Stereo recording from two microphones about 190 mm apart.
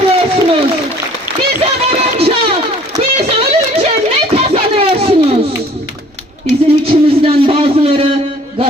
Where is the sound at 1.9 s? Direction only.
30° right (ahead or behind).